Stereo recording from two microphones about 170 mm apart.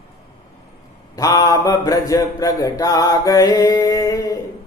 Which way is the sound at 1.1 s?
20° left (ahead or behind).